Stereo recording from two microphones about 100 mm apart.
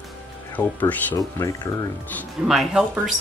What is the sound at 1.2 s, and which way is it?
Speech, 30° left (ahead or behind).